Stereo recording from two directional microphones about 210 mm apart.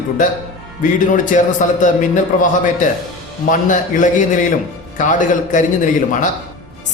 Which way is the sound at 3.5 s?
40° left (ahead or behind).